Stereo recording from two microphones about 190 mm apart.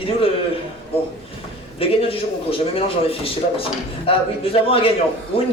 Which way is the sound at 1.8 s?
30° left (ahead or behind).